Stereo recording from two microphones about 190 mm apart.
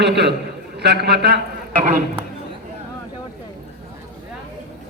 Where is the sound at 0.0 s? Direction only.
60° right (ahead or behind).